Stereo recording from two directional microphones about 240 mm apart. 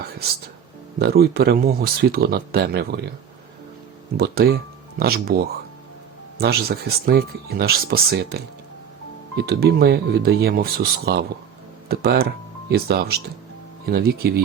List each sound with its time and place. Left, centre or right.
0.9 s speech: right
4.2 s speech: right
9.5 s speech: right